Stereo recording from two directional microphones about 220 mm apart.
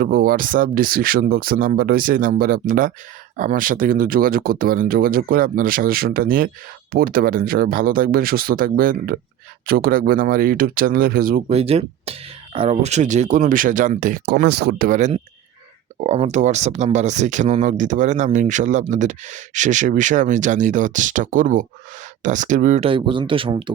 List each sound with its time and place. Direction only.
0.0 s speech: 40° right (ahead or behind); by 23.7 s 20° right (ahead or behind)